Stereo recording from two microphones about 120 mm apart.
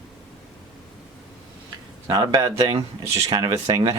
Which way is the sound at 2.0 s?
30° right (ahead or behind).